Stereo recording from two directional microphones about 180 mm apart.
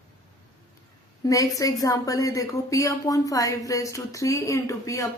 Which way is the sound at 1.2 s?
20° left (ahead or behind).